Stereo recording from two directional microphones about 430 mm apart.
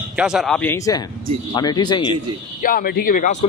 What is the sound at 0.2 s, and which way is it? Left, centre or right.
Speech, centre.